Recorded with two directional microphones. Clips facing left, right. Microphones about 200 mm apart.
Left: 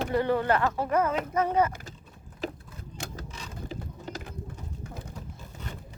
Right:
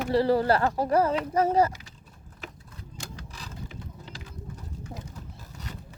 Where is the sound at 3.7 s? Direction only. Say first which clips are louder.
Left 6 dB; 45° left (ahead or behind).